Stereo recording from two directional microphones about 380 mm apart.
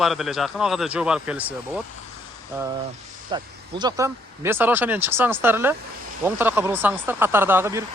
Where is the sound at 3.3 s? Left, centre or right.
Centre.